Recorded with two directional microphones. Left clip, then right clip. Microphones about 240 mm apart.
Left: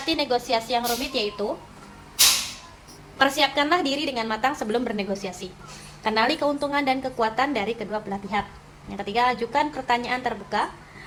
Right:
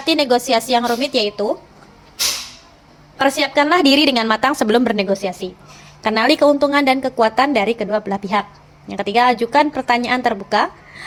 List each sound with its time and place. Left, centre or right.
0.0 s a woman's voice: right
3.2 s a woman's voice: right